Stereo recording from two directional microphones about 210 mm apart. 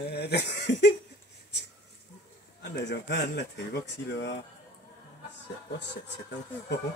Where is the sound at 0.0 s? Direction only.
50° left (ahead or behind).